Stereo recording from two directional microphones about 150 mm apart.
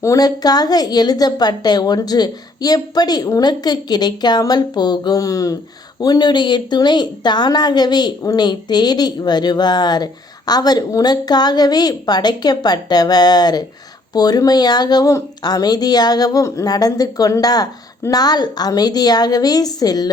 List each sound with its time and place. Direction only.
0.0 s speech: 25° left (ahead or behind)